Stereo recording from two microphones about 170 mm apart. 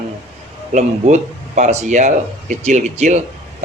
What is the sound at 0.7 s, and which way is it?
Speech, 45° right (ahead or behind).